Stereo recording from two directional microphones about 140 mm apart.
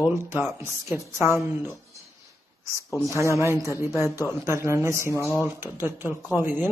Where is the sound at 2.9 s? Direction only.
25° left (ahead or behind).